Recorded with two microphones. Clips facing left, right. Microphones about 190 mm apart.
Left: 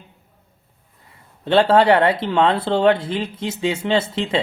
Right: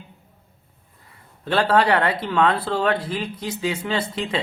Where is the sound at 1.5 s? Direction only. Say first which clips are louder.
Left 5 dB; 25° left (ahead or behind).